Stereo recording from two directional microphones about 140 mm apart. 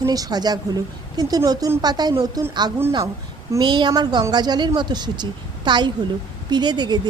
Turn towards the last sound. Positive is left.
turn(degrees=-30)  # may be behind; listen again after turning